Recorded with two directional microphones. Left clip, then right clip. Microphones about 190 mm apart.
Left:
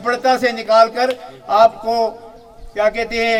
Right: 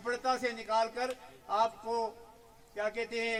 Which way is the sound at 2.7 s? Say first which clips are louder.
Left 18 dB; 20° left (ahead or behind).